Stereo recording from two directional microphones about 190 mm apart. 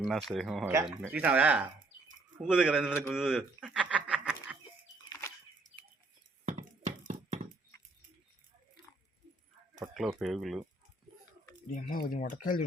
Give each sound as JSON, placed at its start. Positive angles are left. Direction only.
{"t": 0.0, "sound": "speech", "side_deg": 0}
{"t": 0.6, "sound": "speech", "side_deg": -15}
{"t": 3.1, "sound": "a sound", "side_deg": 0}
{"t": 6.4, "sound": "a sound", "side_deg": -40}
{"t": 9.8, "sound": "speech", "side_deg": 0}
{"t": 11.7, "sound": "speech", "side_deg": 50}